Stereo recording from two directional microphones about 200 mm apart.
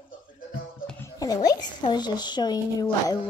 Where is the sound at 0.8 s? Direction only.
15° left (ahead or behind).